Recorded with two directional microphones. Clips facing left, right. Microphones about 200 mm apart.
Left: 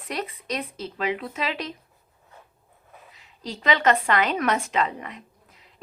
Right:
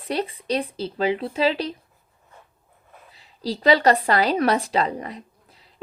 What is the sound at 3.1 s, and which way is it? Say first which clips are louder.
A woman's voice: right 8 dB; 35° right (ahead or behind).